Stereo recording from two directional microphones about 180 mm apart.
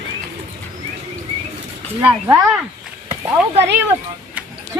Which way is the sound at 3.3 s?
10° right (ahead or behind).